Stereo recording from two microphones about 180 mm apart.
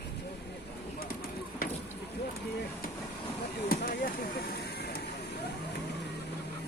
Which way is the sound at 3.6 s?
55° left (ahead or behind).